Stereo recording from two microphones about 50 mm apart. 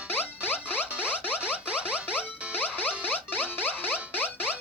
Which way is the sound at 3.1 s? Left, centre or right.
Left.